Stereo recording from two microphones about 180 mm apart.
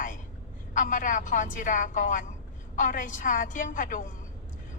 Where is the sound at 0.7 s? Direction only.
45° left (ahead or behind).